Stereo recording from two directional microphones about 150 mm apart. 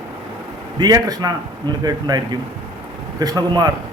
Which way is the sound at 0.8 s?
25° right (ahead or behind).